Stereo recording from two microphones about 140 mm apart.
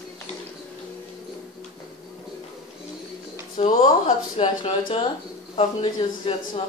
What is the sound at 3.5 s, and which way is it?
Speech, 50° left (ahead or behind).